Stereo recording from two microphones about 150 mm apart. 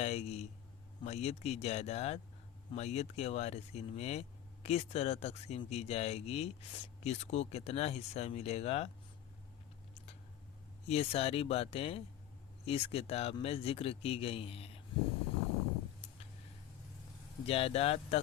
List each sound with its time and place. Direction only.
0.0 s speech: 45° left (ahead or behind)
10.8 s speech: 40° left (ahead or behind)
17.4 s speech: 40° left (ahead or behind)